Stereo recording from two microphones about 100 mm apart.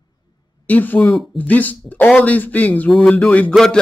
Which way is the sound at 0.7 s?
15° left (ahead or behind).